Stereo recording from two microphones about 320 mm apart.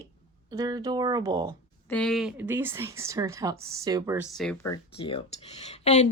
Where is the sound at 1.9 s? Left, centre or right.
Centre.